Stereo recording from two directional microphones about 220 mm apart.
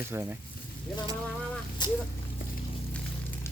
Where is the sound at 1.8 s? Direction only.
20° left (ahead or behind).